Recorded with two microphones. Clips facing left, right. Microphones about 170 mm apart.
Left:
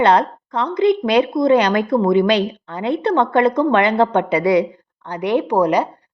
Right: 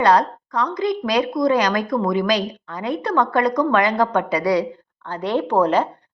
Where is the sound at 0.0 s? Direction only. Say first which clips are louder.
Left 2 dB; 25° left (ahead or behind).